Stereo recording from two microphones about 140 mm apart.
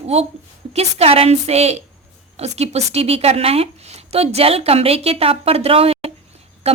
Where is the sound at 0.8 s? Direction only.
45° right (ahead or behind).